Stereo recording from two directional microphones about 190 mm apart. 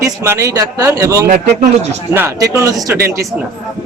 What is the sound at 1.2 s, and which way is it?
Speech, 45° right (ahead or behind).